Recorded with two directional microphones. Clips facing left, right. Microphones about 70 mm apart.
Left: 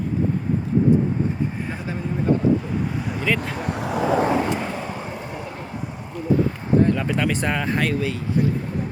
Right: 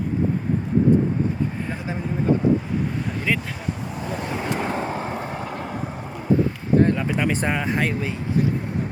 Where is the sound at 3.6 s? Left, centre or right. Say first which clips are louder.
Left 7 dB; left.